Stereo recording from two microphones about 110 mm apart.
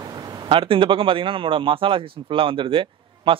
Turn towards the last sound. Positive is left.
turn(degrees=-55)  # may be behind; listen again after turning